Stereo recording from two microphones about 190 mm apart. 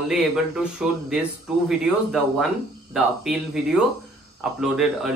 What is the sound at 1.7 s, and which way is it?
Speech, centre (ahead or behind).